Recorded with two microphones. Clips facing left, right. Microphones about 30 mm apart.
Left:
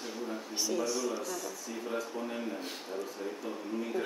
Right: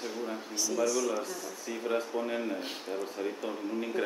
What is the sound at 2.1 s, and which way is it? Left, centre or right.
A man's voice, right.